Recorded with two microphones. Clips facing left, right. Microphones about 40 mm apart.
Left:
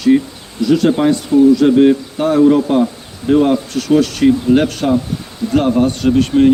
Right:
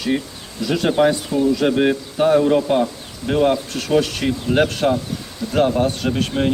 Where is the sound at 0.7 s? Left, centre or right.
Centre.